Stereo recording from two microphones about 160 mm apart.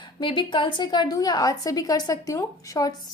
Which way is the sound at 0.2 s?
30° left (ahead or behind).